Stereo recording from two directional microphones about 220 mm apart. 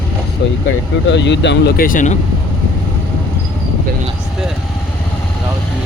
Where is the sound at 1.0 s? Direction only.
55° left (ahead or behind); by 2.1 s 35° left (ahead or behind).